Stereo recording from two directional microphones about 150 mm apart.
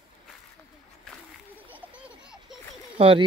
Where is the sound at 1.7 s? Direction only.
10° right (ahead or behind).